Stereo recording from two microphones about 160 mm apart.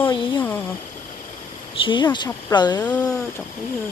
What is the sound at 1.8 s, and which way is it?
Speech, 30° left (ahead or behind).